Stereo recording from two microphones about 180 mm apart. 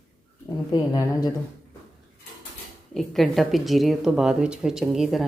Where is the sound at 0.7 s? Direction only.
20° left (ahead or behind).